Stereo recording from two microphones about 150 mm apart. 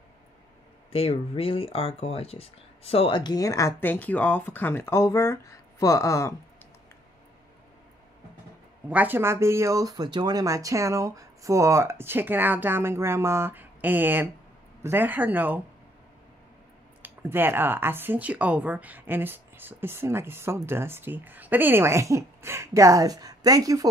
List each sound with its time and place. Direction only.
0.9 s speech: 40° left (ahead or behind); by 6.3 s 20° left (ahead or behind)
8.8 s speech: 10° right (ahead or behind)
17.0 s speech: 15° right (ahead or behind)